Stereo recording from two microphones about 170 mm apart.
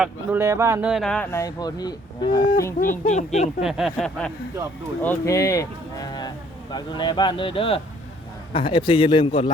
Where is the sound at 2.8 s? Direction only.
50° left (ahead or behind).